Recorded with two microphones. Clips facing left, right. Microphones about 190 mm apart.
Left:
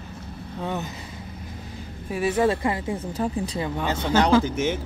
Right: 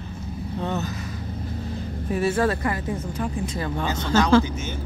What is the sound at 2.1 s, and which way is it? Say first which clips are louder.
A woman's voice: even; 15° left (ahead or behind).